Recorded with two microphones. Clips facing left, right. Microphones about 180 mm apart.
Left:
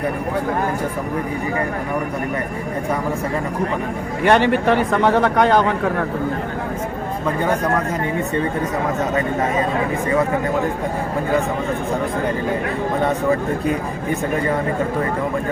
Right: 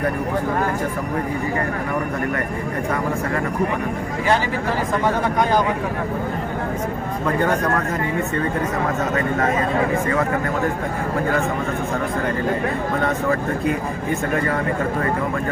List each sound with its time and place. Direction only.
4.3 s speech: 65° left (ahead or behind)